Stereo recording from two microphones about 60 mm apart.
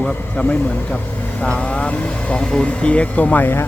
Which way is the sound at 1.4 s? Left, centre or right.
Centre.